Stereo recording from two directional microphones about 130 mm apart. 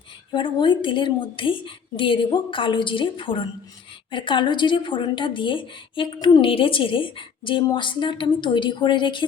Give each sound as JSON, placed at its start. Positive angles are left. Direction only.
{"t": 0.3, "sound": "a woman's voice", "side_deg": 40}